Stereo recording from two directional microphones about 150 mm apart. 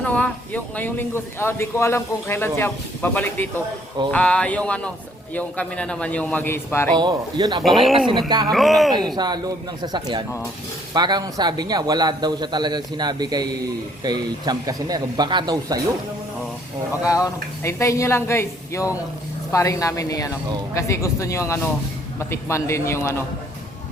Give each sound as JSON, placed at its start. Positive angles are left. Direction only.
{"t": 0.0, "sound": "a man's voice", "side_deg": 10}
{"t": 6.9, "sound": "a man's voice", "side_deg": -30}
{"t": 7.6, "sound": "speech", "side_deg": 0}
{"t": 8.3, "sound": "a man's voice", "side_deg": -25}
{"t": 8.5, "sound": "speech", "side_deg": 0}
{"t": 9.1, "sound": "a man's voice", "side_deg": -30}
{"t": 17.1, "sound": "speech", "side_deg": 20}